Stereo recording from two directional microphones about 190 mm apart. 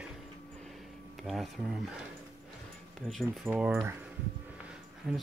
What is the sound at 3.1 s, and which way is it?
Speech, 5° right (ahead or behind).